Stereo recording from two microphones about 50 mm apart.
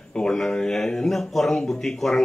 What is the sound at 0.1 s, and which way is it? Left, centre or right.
Speech, centre.